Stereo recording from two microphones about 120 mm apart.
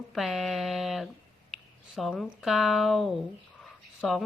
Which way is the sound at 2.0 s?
Centre (ahead or behind).